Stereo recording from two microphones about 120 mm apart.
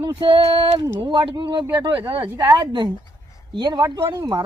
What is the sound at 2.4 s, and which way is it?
Speech, 35° right (ahead or behind).